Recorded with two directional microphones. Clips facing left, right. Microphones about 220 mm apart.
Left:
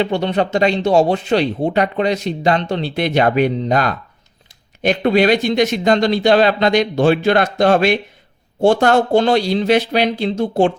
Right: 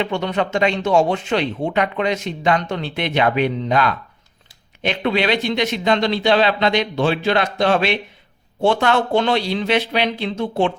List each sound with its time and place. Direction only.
0.0 s speech: 35° left (ahead or behind)